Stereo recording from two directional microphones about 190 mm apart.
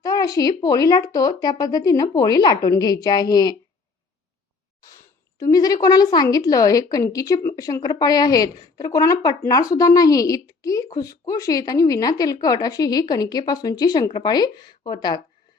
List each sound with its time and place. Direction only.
0.0 s a woman's voice: 20° left (ahead or behind)
5.4 s a woman's voice: 20° left (ahead or behind)